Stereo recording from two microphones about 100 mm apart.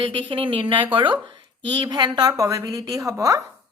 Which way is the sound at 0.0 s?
60° right (ahead or behind).